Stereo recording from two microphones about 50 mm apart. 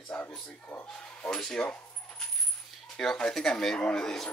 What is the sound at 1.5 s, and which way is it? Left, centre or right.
Speech, left.